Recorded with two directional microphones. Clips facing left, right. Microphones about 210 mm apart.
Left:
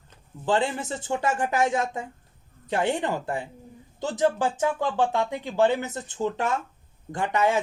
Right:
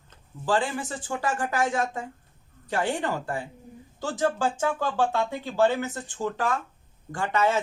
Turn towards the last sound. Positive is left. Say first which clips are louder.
# left 1 dB
turn(degrees=15)  # may be behind; listen again after turning